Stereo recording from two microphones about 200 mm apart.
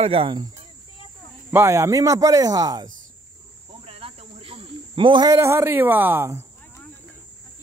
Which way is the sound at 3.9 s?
30° right (ahead or behind).